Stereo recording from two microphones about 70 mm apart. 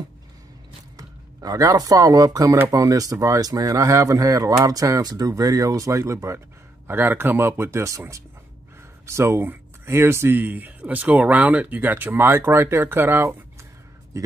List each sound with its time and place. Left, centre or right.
0.9 s speech: right
6.9 s speech: right
9.0 s speech: right